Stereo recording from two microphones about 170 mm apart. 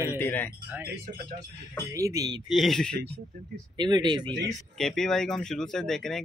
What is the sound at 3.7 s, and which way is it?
Speech, 25° right (ahead or behind).